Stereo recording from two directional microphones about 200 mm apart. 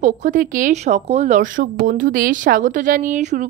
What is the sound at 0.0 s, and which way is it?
Speech, 40° right (ahead or behind).